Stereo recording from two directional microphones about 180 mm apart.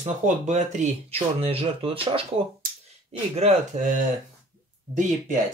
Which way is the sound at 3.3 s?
40° right (ahead or behind).